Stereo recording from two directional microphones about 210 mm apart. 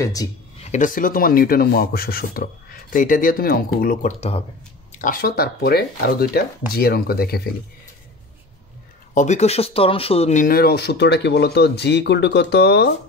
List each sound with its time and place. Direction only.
0.0 s speech: 15° left (ahead or behind)
0.7 s speech: 35° left (ahead or behind)
4.9 s speech: 40° left (ahead or behind)
9.1 s speech: 35° left (ahead or behind); by 12.9 s 50° left (ahead or behind)